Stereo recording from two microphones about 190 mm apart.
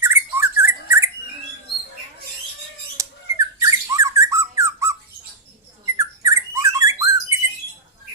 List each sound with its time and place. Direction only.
0.0 s bird: 15° right (ahead or behind)
3.0 s squawk: 15° right (ahead or behind)